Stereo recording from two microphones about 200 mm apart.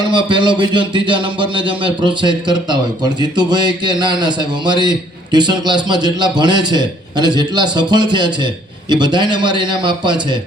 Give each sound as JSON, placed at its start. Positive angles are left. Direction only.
{"t": 0.0, "sound": "speech", "side_deg": -25}